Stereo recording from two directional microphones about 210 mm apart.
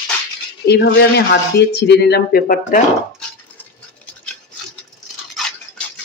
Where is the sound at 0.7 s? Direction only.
50° left (ahead or behind).